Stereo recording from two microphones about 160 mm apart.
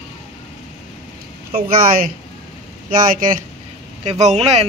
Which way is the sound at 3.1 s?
55° right (ahead or behind).